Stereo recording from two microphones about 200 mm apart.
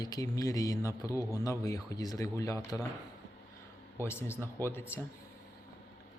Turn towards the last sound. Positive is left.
turn(degrees=10)  # may be behind; listen again after turning